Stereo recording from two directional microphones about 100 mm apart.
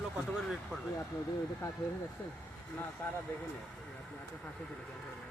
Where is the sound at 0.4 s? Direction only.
Centre (ahead or behind).